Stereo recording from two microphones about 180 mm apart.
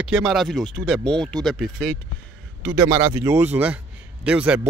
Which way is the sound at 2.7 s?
15° right (ahead or behind).